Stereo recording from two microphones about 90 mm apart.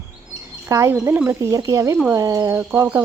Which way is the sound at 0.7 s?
35° right (ahead or behind).